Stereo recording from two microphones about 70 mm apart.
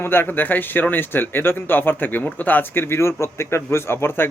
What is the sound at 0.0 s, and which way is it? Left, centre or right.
Speech, left.